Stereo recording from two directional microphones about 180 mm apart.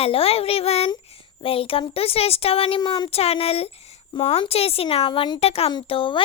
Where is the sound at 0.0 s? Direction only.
30° left (ahead or behind).